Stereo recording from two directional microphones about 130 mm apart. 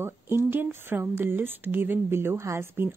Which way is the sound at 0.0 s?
20° right (ahead or behind).